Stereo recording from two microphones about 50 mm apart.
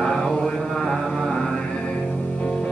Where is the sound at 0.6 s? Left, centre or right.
Centre.